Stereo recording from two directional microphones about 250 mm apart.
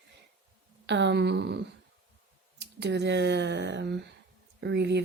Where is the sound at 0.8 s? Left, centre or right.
Right.